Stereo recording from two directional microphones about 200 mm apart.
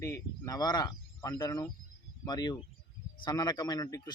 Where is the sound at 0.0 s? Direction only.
15° left (ahead or behind).